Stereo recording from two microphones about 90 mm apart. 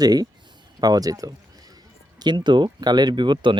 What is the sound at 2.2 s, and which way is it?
Speech, 55° right (ahead or behind).